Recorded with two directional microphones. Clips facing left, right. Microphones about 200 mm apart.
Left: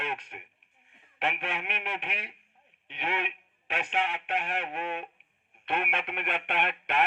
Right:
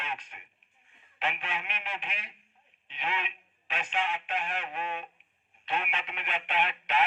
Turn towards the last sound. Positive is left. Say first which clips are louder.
# even
turn(degrees=60)  # may be behind; listen again after turning